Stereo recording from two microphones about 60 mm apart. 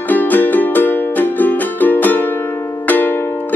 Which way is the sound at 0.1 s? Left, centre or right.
Left.